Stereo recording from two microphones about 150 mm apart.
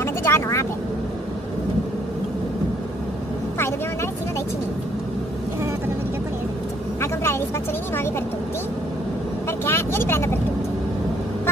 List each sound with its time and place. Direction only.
0.0 s vehicle: 15° left (ahead or behind)
7.0 s vehicle: 15° left (ahead or behind)
9.7 s vehicle: 15° left (ahead or behind)